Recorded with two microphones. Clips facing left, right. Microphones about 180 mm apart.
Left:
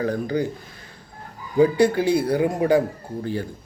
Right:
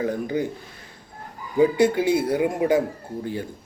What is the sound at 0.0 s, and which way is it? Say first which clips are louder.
Speech: left 1 dB; 20° right (ahead or behind).